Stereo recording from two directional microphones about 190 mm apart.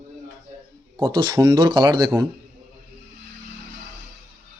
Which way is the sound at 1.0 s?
25° right (ahead or behind).